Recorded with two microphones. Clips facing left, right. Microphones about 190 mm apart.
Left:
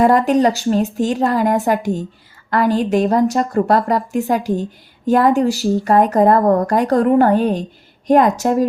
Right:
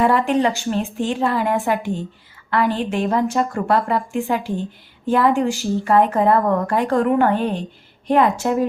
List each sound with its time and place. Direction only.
0.0 s a woman's voice: 40° left (ahead or behind)